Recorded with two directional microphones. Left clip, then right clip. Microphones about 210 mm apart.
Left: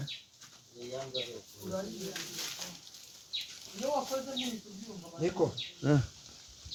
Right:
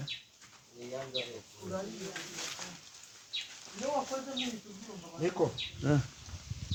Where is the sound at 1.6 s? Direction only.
50° left (ahead or behind).